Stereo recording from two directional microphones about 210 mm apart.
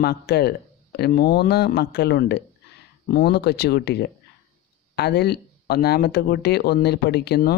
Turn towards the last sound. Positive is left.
turn(degrees=50)  # may be behind; listen again after turning